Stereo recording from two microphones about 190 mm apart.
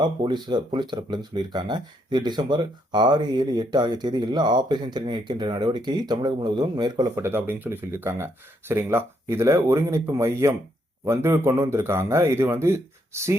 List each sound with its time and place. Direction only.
0.0 s speech: 25° right (ahead or behind)